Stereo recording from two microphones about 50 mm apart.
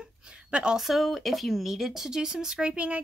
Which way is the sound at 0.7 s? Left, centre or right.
Centre.